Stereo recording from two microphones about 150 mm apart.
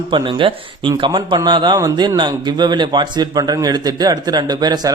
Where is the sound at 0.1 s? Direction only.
30° right (ahead or behind).